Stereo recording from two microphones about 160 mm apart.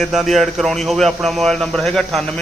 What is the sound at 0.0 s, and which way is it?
Speech, centre (ahead or behind).